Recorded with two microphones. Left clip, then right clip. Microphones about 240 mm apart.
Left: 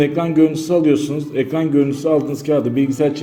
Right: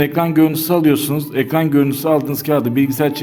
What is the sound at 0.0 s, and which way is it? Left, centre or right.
A man's voice, right.